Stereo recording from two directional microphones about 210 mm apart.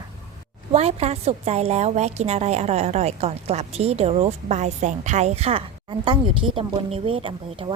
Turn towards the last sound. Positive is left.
turn(degrees=-25)  # may be behind; listen again after turning